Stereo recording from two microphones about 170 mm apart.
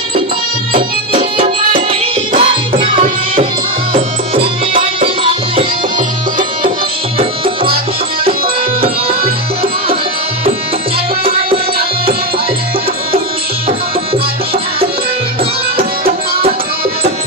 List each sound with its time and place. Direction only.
1.4 s music: 35° right (ahead or behind)
3.9 s music: 35° right (ahead or behind)
7.2 s tabla: 35° right (ahead or behind)
8.8 s music: 35° right (ahead or behind)
13.7 s music: 35° right (ahead or behind)